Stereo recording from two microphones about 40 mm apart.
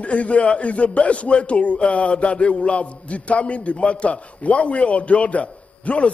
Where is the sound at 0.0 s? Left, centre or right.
Left.